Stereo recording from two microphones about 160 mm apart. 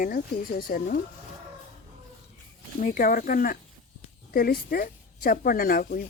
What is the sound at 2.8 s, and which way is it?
Speech, 60° left (ahead or behind).